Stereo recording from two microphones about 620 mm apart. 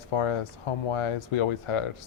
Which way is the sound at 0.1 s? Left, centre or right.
Left.